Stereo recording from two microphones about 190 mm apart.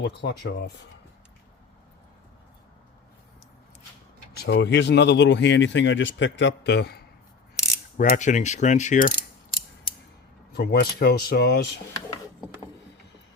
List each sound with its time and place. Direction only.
0.0 s speech: 65° left (ahead or behind)
4.4 s speech: 65° left (ahead or behind)
7.9 s speech: 45° left (ahead or behind)
10.5 s speech: 55° left (ahead or behind)
11.9 s a sound: 20° left (ahead or behind)